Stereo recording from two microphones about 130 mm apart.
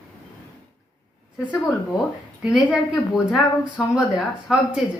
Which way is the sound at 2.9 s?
Centre (ahead or behind).